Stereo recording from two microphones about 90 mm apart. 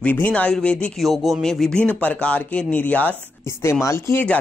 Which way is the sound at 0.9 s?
Centre (ahead or behind).